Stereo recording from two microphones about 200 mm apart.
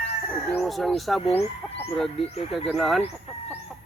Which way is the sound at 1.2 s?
30° left (ahead or behind).